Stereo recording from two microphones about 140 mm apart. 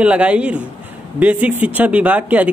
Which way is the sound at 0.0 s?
10° right (ahead or behind).